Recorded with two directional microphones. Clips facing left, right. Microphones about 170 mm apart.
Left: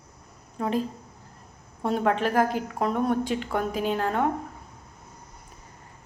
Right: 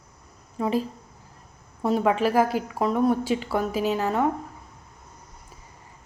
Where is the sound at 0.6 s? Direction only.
Centre (ahead or behind).